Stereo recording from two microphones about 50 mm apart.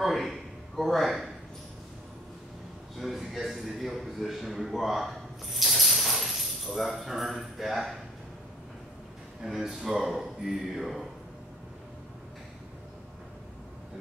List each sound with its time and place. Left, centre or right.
0.0 s speech: centre
3.0 s a man's voice: centre
9.4 s a man's voice: centre